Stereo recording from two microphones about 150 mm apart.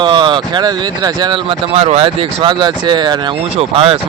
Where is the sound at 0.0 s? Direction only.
30° right (ahead or behind).